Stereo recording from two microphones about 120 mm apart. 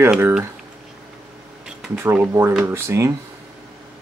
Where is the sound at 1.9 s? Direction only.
20° right (ahead or behind).